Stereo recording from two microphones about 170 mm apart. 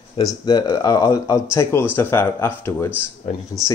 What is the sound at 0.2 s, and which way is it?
Speech, 25° left (ahead or behind).